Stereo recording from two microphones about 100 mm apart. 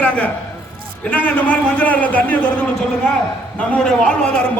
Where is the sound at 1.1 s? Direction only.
15° left (ahead or behind).